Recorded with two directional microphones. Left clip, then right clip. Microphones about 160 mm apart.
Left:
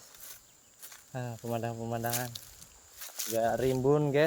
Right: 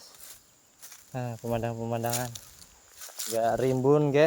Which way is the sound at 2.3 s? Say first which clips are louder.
Even; 5° right (ahead or behind).